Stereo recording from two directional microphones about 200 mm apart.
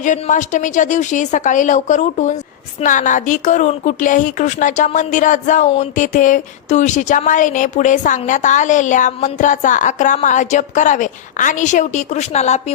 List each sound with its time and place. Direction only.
0.0 s speech: 40° left (ahead or behind)